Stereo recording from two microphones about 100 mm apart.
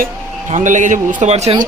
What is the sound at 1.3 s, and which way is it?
Speech, 90° right.